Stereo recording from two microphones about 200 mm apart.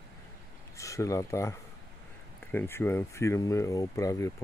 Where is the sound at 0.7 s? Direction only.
15° left (ahead or behind).